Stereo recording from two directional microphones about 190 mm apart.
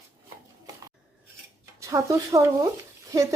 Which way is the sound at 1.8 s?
15° right (ahead or behind).